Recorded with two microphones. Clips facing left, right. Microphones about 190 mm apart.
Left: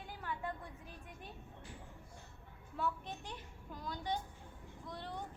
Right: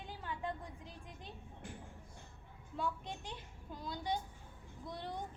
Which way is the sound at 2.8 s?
15° right (ahead or behind).